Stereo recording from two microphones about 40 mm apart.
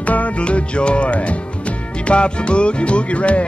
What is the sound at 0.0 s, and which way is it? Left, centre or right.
Music, left.